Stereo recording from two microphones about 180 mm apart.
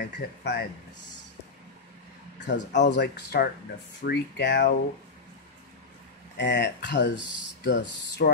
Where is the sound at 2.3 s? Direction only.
80° left.